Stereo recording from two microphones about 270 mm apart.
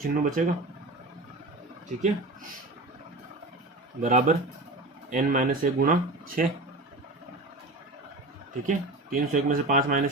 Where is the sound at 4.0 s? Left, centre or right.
Right.